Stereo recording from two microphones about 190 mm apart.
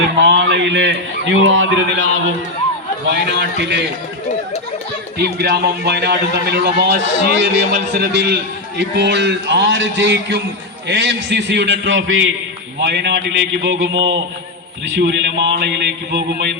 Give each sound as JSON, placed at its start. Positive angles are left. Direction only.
{"t": 0.2, "sound": "a man's voice", "side_deg": -70}
{"t": 3.1, "sound": "a man's voice", "side_deg": -65}
{"t": 5.1, "sound": "a man's voice", "side_deg": -55}
{"t": 12.8, "sound": "a man's voice", "side_deg": -65}